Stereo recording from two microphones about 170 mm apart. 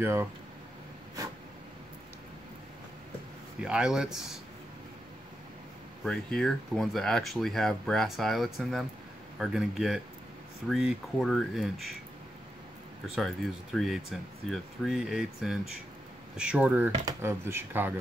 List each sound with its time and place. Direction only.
0.0 s speech: 15° right (ahead or behind)
3.6 s speech: 5° right (ahead or behind)
6.0 s speech: centre (ahead or behind)
13.0 s speech: centre (ahead or behind)